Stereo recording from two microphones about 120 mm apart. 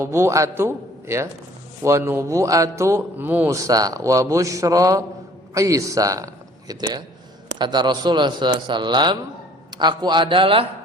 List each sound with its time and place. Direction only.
0.0 s a man's voice: 25° right (ahead or behind); by 10.7 s 45° right (ahead or behind)